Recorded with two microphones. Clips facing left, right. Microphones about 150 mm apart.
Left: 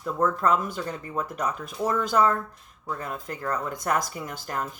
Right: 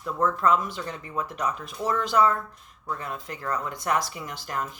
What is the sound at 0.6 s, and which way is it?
Speech, 45° left (ahead or behind).